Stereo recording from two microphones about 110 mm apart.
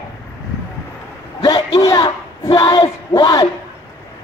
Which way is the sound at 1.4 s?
35° left (ahead or behind).